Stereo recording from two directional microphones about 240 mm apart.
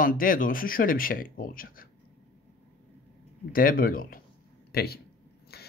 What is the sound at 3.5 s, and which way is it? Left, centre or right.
Speech, left.